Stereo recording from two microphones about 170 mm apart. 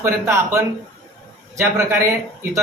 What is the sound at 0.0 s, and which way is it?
Speech, 15° right (ahead or behind).